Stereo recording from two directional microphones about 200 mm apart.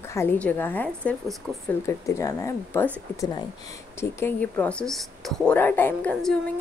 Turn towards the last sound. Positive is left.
turn(degrees=5)  # may be behind; listen again after turning